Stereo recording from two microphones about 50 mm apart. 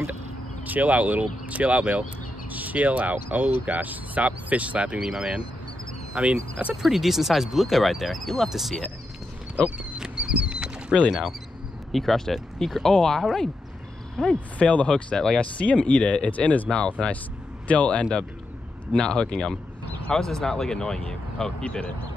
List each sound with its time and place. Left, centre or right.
0.7 s speech: right
5.0 s speech: centre
6.1 s speech: right
6.7 s speech: centre
9.9 s a sound: centre
11.1 s speech: centre; by 15.1 s left
15.1 s speech: centre
15.5 s speech: left
16.3 s speech: left
16.6 s speech: centre
21.6 s speech: left